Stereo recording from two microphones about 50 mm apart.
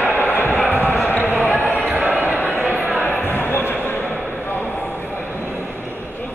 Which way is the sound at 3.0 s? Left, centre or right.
Left.